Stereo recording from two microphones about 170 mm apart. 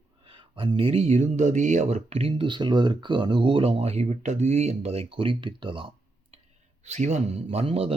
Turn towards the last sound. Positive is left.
turn(degrees=-35)  # may be behind; listen again after turning